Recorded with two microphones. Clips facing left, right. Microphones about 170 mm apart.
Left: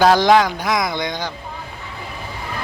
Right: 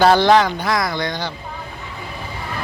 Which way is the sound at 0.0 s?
10° left (ahead or behind).